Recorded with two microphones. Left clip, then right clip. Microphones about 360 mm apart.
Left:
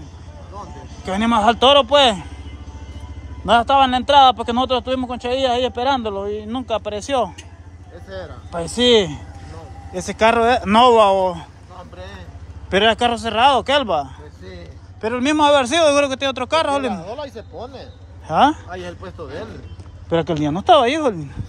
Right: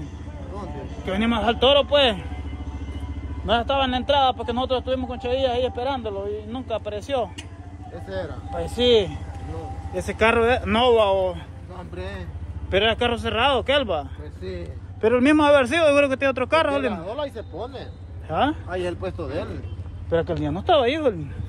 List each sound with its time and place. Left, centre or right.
0.6 s a man's voice: centre
3.4 s a man's voice: centre
20.1 s a man's voice: left